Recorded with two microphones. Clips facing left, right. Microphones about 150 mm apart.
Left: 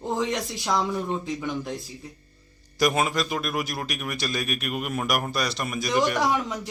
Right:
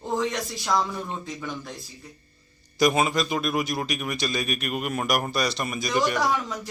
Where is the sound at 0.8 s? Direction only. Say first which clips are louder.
Left 2 dB; centre (ahead or behind).